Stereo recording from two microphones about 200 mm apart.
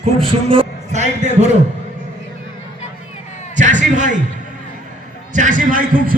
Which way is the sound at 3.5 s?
40° right (ahead or behind).